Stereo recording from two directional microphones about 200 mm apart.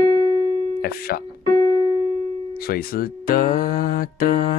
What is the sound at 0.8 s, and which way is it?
Speech, 50° left (ahead or behind).